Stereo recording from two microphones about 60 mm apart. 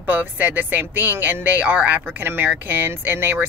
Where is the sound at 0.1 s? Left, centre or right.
Right.